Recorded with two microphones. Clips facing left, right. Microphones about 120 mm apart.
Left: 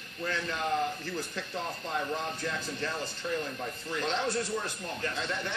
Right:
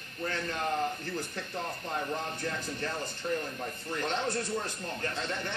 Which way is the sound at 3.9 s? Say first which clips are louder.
Left 1 dB; 55° right (ahead or behind).